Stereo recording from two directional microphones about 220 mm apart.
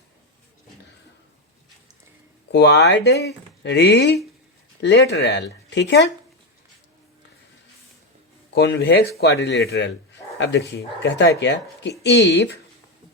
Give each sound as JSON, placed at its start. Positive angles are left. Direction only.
{"t": 2.5, "sound": "speech", "side_deg": 50}
{"t": 8.4, "sound": "speech", "side_deg": 50}